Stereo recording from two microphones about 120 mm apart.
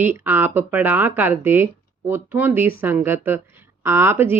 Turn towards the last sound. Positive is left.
turn(degrees=-20)  # may be behind; listen again after turning